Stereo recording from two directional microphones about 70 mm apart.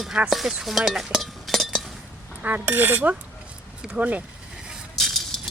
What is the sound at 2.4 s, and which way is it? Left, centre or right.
Speech, right.